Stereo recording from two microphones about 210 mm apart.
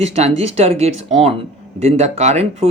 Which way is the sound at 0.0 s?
30° right (ahead or behind).